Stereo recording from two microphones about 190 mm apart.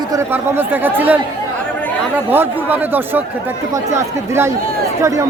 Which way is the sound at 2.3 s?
10° right (ahead or behind).